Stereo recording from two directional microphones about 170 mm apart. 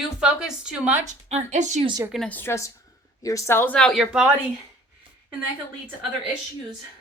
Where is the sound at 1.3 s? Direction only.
40° right (ahead or behind).